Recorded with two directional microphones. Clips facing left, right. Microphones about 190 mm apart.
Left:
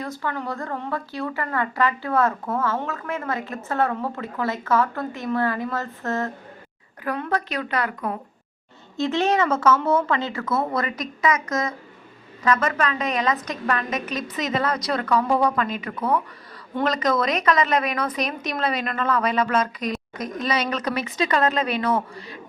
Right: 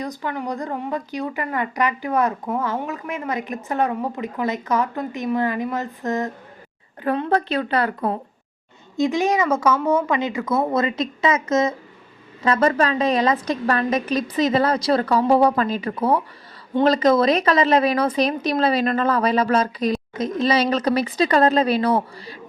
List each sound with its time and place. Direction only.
0.0 s speech: 15° right (ahead or behind)
7.0 s a woman's voice: 30° right (ahead or behind)
9.0 s a woman's voice: 10° right (ahead or behind); by 22.4 s 35° right (ahead or behind)